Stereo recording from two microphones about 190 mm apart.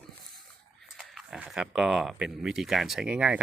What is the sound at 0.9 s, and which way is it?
Speech, centre (ahead or behind).